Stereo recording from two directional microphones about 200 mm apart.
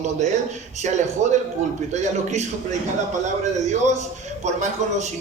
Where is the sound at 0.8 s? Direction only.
35° right (ahead or behind).